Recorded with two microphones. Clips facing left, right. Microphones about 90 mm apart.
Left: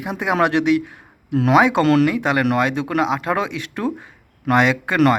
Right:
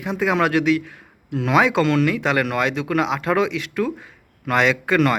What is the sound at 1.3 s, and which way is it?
Speech, 30° left (ahead or behind).